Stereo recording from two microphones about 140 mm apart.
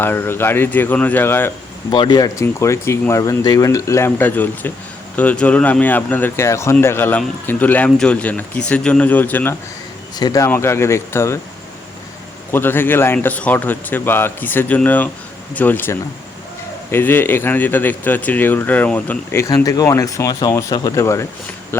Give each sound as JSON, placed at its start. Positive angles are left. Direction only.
{"t": 0.0, "sound": "speech", "side_deg": 15}
{"t": 1.9, "sound": "speech", "side_deg": 30}
{"t": 10.2, "sound": "speech", "side_deg": 25}
{"t": 12.5, "sound": "speech", "side_deg": 15}